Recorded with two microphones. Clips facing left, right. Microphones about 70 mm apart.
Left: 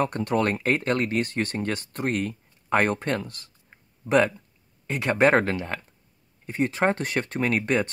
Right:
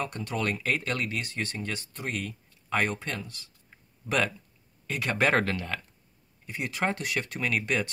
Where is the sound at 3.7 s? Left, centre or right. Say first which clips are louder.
Left 8 dB; left.